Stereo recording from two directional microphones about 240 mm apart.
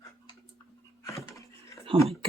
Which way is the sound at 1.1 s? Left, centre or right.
Centre.